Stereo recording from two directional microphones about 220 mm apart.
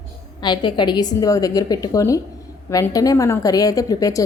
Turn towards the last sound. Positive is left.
turn(degrees=15)  # may be behind; listen again after turning